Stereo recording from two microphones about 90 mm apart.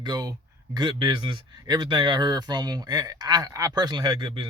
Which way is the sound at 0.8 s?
70° right (ahead or behind).